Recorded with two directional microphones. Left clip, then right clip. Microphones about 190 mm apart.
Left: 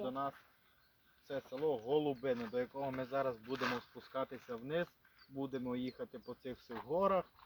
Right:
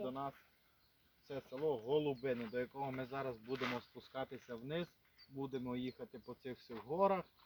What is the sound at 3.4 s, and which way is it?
Speech, 40° left (ahead or behind).